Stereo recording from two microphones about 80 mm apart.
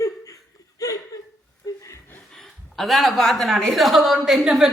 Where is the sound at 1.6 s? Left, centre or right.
Left.